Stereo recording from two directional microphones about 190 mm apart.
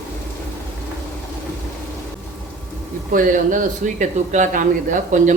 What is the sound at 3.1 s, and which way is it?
Speech, 45° right (ahead or behind).